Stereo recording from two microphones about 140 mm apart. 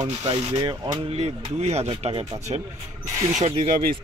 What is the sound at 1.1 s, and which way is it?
Speech, 50° right (ahead or behind).